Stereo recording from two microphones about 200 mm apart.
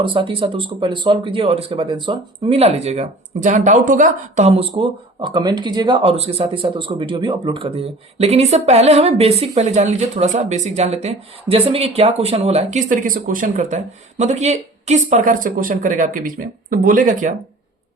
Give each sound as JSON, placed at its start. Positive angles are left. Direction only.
{"t": 0.0, "sound": "speech", "side_deg": -25}